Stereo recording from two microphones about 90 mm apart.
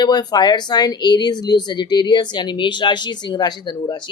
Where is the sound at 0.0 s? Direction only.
50° left (ahead or behind).